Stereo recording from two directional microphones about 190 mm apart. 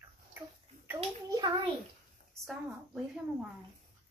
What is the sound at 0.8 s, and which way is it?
Speech, 20° right (ahead or behind).